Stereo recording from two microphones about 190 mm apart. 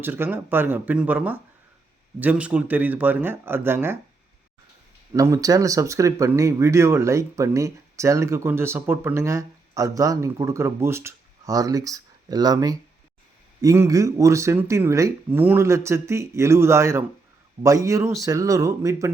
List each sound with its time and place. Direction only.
0.0 s speech: 10° right (ahead or behind)
5.1 s speech: 15° right (ahead or behind)